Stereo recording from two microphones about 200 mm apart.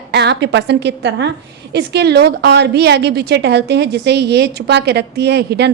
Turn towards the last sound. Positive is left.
turn(degrees=-55)  # may be behind; listen again after turning